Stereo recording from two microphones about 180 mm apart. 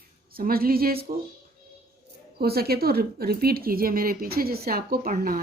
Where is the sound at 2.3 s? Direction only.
60° right (ahead or behind).